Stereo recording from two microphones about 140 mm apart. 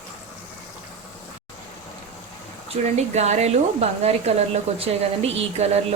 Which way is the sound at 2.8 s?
55° right (ahead or behind).